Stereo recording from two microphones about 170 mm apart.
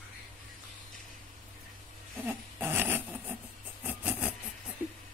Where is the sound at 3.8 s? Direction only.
5° right (ahead or behind).